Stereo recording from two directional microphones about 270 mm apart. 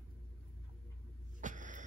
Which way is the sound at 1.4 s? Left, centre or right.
Right.